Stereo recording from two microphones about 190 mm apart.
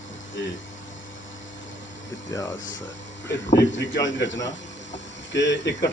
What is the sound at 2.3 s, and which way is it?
Speech, 15° left (ahead or behind).